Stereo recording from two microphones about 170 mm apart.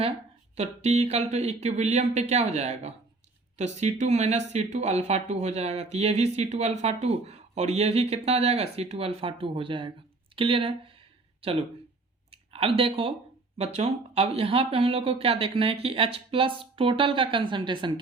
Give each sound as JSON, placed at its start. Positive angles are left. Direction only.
{"t": 0.5, "sound": "speech", "side_deg": -40}
{"t": 12.3, "sound": "speech", "side_deg": -35}